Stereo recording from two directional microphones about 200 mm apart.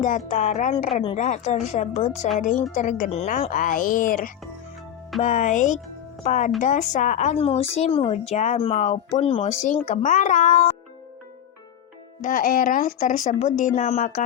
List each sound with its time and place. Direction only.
0.0 s speech: 40° left (ahead or behind)
12.2 s speech: 45° left (ahead or behind)